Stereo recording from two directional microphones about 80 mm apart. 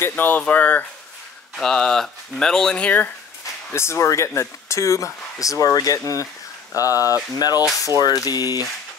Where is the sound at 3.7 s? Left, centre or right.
Left.